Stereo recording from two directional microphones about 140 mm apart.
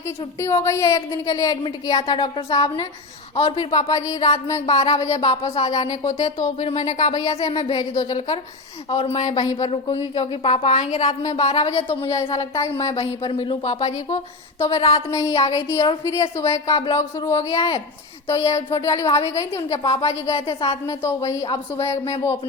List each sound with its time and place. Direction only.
0.3 s speech: 20° left (ahead or behind)
3.3 s speech: 45° left (ahead or behind)
12.3 s speech: 25° left (ahead or behind)
12.7 s speech: 40° left (ahead or behind)
15.1 s speech: 25° left (ahead or behind)
16.7 s speech: 35° left (ahead or behind)
17.2 s speech: 20° left (ahead or behind)
17.6 s speech: 45° left (ahead or behind)
18.5 s speech: 25° left (ahead or behind)
19.7 s speech: 35° left (ahead or behind)
20.8 s speech: 20° left (ahead or behind)